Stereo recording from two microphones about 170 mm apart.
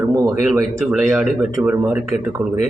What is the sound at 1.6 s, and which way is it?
Speech, 10° right (ahead or behind).